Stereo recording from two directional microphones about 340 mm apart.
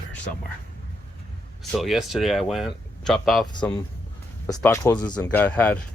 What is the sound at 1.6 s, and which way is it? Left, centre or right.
Speech, centre.